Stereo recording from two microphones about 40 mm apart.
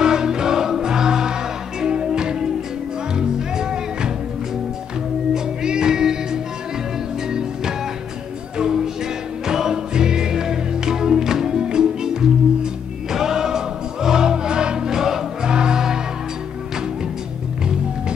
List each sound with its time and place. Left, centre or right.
0.0 s music: centre
5.3 s music: centre